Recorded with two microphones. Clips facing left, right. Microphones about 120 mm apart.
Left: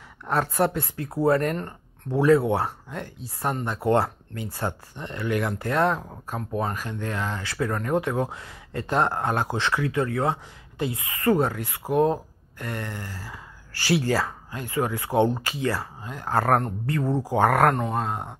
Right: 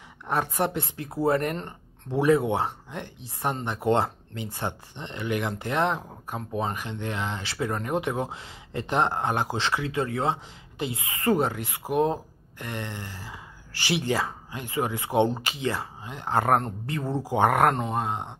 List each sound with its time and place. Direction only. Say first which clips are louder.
0.3 s speech: left 3 dB; 20° right (ahead or behind)